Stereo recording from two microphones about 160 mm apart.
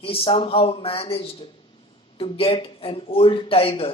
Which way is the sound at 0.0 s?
35° left (ahead or behind).